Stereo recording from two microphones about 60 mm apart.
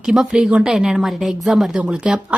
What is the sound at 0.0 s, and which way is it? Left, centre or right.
A woman's voice, centre.